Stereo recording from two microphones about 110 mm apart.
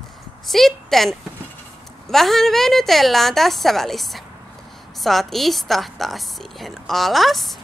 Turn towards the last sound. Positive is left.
turn(degrees=0)  # may be behind; listen again after turning